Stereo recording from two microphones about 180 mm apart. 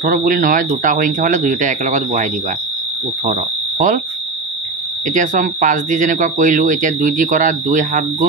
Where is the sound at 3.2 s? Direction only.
45° right (ahead or behind).